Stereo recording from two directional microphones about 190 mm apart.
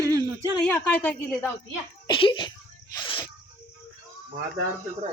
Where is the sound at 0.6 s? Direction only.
5° left (ahead or behind).